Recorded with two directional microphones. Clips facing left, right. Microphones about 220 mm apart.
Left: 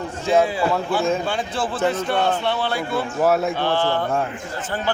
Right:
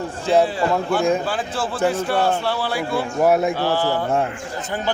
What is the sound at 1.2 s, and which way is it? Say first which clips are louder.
A man's voice: even; 5° right (ahead or behind).